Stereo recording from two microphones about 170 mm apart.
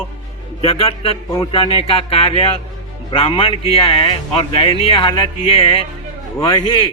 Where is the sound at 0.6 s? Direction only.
35° left (ahead or behind).